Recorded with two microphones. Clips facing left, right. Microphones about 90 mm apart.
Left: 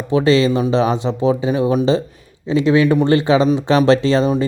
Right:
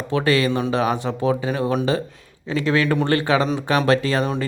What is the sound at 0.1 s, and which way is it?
Speech, 20° left (ahead or behind).